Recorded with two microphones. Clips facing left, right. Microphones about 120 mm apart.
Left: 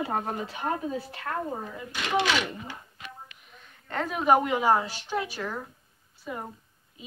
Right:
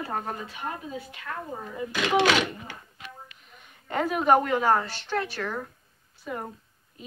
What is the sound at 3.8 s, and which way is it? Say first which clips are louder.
A woman's voice: right 1 dB; 5° right (ahead or behind).